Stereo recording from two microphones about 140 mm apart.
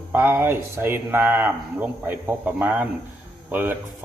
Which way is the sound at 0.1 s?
15° right (ahead or behind).